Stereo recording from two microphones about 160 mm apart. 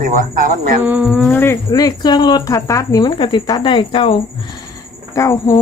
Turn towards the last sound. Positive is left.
turn(degrees=20)  # may be behind; listen again after turning